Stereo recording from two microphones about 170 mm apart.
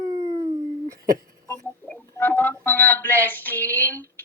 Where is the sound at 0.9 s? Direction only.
20° right (ahead or behind).